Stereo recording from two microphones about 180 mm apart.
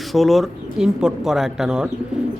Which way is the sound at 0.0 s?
Centre (ahead or behind).